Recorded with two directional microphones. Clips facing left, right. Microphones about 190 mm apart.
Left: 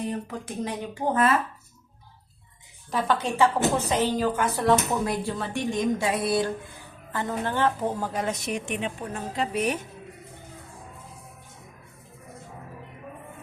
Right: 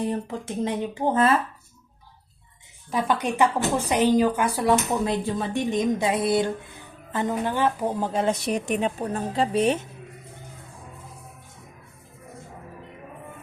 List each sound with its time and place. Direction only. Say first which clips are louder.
0.0 s a woman's voice: right 3 dB; 30° right (ahead or behind)
2.9 s a woman's voice: right 1 dB; 10° right (ahead or behind)
8.0 s a woman's voice: right 5 dB; 25° right (ahead or behind)